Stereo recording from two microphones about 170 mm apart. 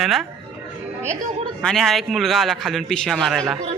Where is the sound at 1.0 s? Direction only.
45° right (ahead or behind).